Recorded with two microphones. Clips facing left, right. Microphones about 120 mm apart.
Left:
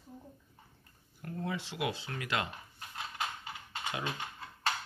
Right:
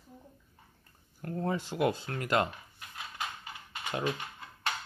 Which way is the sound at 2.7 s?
25° left (ahead or behind).